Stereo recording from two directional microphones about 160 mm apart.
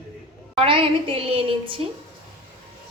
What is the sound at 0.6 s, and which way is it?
A woman's voice, 35° right (ahead or behind).